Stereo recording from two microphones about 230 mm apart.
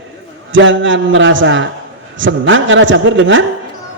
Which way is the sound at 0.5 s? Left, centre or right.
Right.